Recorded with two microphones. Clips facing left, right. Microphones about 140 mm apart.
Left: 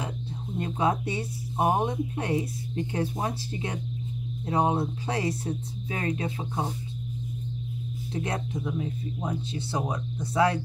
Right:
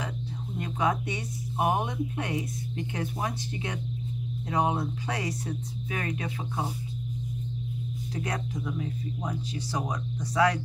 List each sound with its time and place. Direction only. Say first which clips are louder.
0.6 s speech: left 2 dB; 30° left (ahead or behind)
8.1 s speech: left 3 dB; 25° left (ahead or behind)